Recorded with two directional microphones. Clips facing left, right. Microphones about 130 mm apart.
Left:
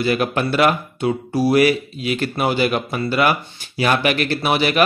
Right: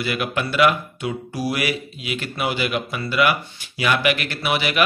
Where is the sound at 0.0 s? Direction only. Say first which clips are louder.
Left 5 dB; 35° left (ahead or behind).